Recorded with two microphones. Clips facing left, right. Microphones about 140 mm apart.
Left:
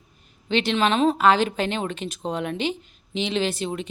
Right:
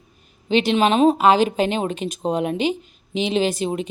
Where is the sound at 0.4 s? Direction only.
15° right (ahead or behind).